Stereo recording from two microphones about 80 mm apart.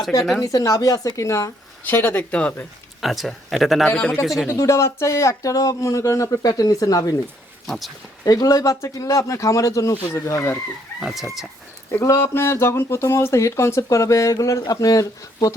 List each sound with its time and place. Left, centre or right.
0.4 s speech: left
1.8 s speech: left
3.0 s speech: centre
3.8 s a man's voice: centre
4.2 s speech: centre
4.5 s speech: left
6.5 s speech: left
8.2 s speech: left
11.0 s speech: centre
11.9 s speech: left